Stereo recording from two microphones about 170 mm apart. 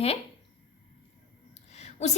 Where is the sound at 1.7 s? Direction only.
40° left (ahead or behind).